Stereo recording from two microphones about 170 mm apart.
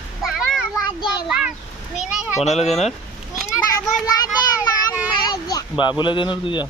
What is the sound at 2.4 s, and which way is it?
Speech, 40° left (ahead or behind).